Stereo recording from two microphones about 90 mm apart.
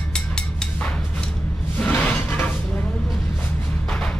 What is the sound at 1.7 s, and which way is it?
Music, 20° left (ahead or behind).